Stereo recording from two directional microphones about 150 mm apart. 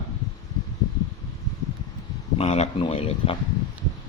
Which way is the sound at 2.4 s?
40° left (ahead or behind).